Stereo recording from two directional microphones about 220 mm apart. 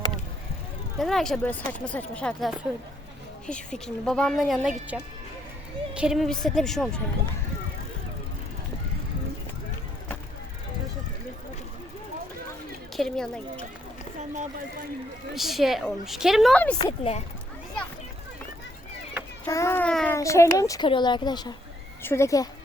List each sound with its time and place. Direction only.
0.9 s speech: centre (ahead or behind)
13.0 s speech: 5° left (ahead or behind)
14.2 s speech: 35° right (ahead or behind)
15.4 s speech: centre (ahead or behind)
16.7 s speech: 25° left (ahead or behind)
19.5 s a woman's voice: 10° left (ahead or behind)